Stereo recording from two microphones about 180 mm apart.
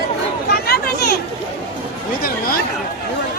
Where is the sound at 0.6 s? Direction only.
60° left (ahead or behind).